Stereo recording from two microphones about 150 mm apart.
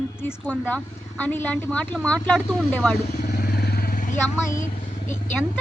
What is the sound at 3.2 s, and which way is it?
Vehicle, 90° left.